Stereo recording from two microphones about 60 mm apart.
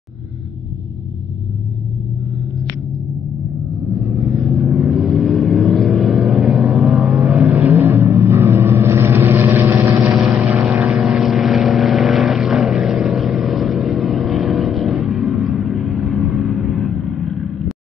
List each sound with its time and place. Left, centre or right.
3.3 s a sound: centre
4.2 s vehicle: centre
7.5 s vehicle: right
7.8 s vehicle: right
10.1 s vehicle: right
10.9 s vehicle: centre